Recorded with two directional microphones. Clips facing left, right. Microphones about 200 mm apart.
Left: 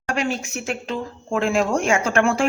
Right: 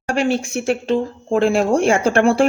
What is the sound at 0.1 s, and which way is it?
Speech, 30° right (ahead or behind).